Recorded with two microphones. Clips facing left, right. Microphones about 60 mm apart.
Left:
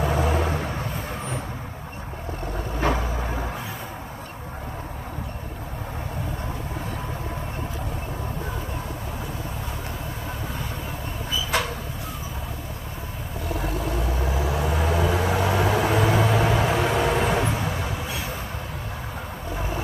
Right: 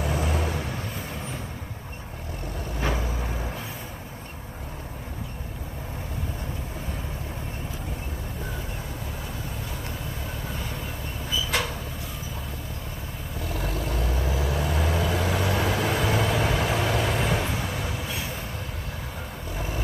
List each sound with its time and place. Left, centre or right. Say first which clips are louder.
0.0 s vehicle: left 4 dB; left
13.6 s vehicle: left 2 dB; left